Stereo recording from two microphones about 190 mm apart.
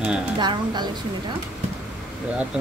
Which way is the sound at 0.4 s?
20° right (ahead or behind).